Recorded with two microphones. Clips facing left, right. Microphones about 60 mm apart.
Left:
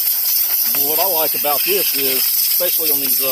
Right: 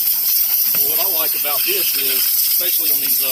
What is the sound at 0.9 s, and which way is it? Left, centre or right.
Speech, left.